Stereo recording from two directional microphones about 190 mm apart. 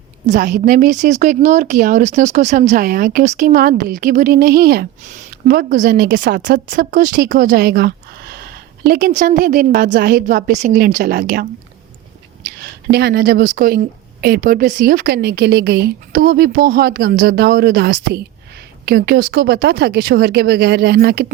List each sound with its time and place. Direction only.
0.3 s a woman's voice: 45° right (ahead or behind)
5.0 s a woman's voice: 45° right (ahead or behind)
12.5 s a woman's voice: 55° right (ahead or behind)